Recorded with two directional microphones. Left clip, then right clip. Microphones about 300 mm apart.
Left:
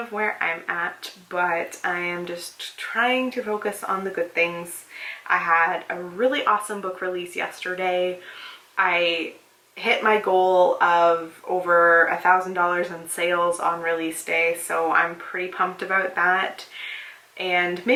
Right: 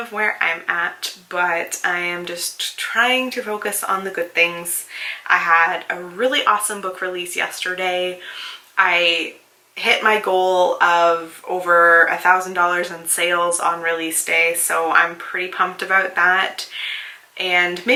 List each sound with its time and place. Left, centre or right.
0.0 s speech: centre
10.3 s speech: left
10.8 s speech: centre